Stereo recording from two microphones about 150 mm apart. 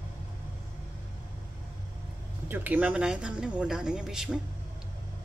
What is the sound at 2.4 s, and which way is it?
Speech, 10° right (ahead or behind).